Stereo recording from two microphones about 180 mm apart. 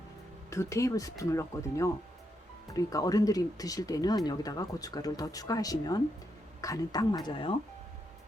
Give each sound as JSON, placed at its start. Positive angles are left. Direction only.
{"t": 0.5, "sound": "speech", "side_deg": 15}